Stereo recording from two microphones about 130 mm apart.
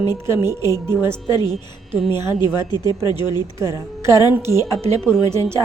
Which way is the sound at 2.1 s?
35° left (ahead or behind).